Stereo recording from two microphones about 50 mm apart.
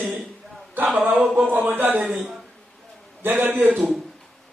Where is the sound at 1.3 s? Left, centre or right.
Right.